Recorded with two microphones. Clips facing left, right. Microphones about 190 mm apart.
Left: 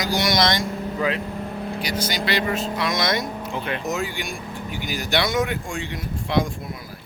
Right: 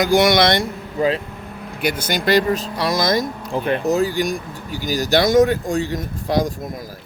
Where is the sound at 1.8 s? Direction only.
55° right (ahead or behind).